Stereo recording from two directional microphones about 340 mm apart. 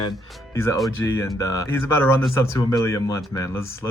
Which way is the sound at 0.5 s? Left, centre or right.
Centre.